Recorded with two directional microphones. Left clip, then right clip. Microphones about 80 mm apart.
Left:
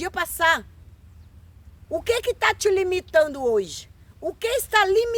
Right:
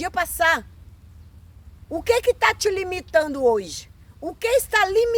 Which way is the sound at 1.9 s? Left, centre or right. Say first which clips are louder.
Right 4 dB; left.